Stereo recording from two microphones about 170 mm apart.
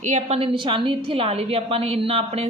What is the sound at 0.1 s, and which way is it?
A woman's voice, 35° right (ahead or behind).